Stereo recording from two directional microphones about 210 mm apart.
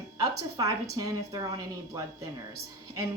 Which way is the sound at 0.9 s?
20° right (ahead or behind).